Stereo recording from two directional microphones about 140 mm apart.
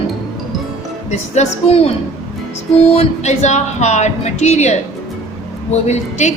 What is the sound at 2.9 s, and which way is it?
A woman's voice, 55° left (ahead or behind).